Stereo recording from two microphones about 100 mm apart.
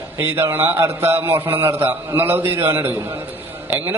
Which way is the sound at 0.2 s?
20° right (ahead or behind).